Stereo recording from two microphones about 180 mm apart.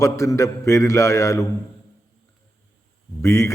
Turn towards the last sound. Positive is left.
turn(degrees=15)  # may be behind; listen again after turning